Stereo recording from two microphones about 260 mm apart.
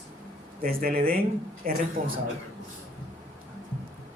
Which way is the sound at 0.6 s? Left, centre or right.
Right.